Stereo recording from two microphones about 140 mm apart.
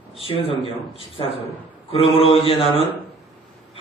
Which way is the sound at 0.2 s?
40° left (ahead or behind).